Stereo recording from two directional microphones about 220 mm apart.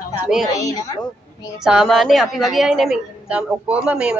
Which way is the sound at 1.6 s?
Centre (ahead or behind).